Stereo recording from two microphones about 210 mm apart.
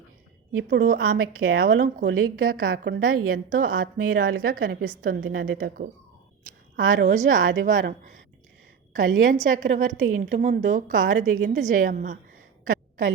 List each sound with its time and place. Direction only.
0.5 s a woman's voice: 60° right (ahead or behind)
0.9 s a woman's voice: 45° right (ahead or behind)
9.2 s a woman's voice: 35° right (ahead or behind)